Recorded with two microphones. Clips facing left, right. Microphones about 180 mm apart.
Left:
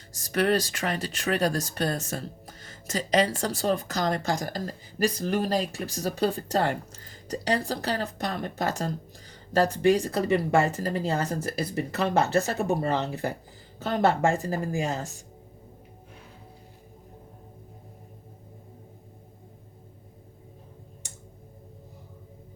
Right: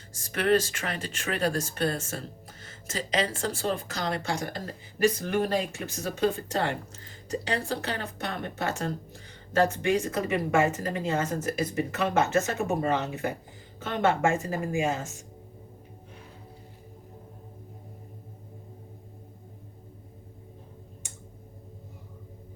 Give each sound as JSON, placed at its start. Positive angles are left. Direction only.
{"t": 0.1, "sound": "speech", "side_deg": 40}